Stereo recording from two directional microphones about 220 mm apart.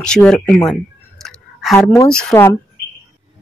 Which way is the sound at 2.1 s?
5° left (ahead or behind).